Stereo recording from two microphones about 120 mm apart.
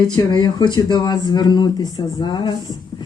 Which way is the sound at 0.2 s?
35° left (ahead or behind).